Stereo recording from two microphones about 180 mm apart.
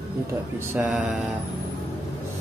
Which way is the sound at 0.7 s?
5° right (ahead or behind).